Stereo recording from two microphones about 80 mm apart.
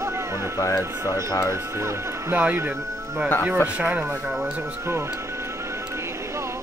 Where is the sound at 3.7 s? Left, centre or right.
Right.